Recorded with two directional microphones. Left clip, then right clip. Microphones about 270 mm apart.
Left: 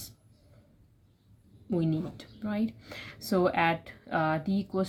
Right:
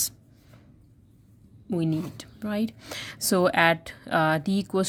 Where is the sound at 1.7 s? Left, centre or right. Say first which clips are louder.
Right 3 dB; right.